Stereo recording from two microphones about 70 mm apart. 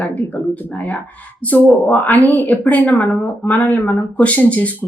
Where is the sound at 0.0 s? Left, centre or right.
Left.